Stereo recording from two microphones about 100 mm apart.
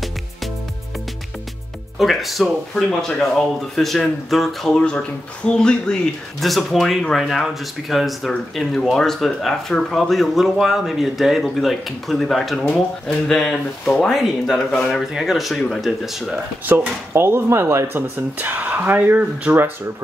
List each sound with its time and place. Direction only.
2.0 s speech: centre (ahead or behind)
16.6 s speech: 20° right (ahead or behind)
18.1 s speech: 15° right (ahead or behind)